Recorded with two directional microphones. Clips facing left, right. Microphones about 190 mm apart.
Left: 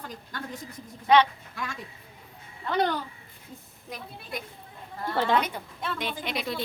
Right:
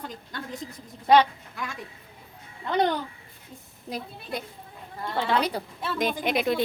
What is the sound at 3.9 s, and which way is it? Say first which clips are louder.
A woman's voice: right 4 dB; 35° right (ahead or behind).